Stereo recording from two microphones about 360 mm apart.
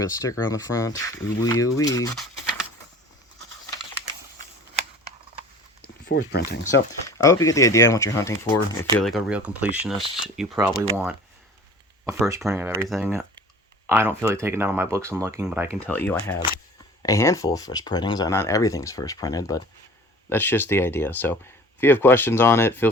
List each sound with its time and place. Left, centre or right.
0.0 s speech: centre
6.1 s speech: left
6.5 s speech: left
7.1 s speech: centre
12.0 s speech: centre
15.8 s speech: centre